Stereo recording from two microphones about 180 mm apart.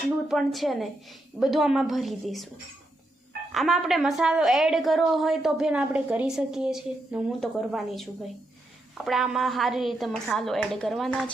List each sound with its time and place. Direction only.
0.3 s a woman's voice: centre (ahead or behind)
3.5 s a woman's voice: centre (ahead or behind)
9.0 s a woman's voice: centre (ahead or behind)